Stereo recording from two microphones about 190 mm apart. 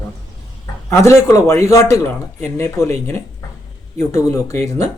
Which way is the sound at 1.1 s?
15° left (ahead or behind).